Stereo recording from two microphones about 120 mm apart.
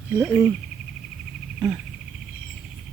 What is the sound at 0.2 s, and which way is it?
Speech, 10° right (ahead or behind).